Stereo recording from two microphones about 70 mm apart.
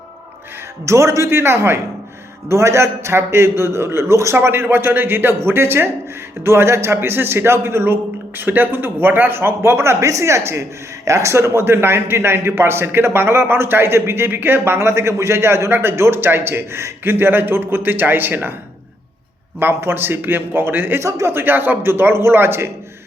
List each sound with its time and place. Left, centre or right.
0.9 s speech: right
19.5 s speech: right
21.0 s speech: right
21.3 s speech: right